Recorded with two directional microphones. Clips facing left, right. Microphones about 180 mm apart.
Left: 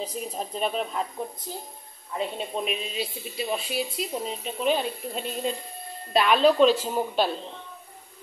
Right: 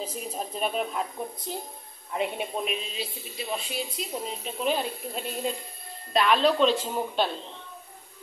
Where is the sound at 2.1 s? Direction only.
15° right (ahead or behind).